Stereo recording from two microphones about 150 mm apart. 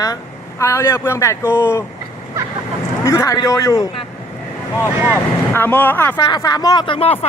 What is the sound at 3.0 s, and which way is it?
Speech, 20° left (ahead or behind).